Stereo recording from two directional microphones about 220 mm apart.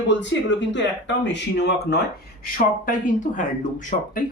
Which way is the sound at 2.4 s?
35° left (ahead or behind).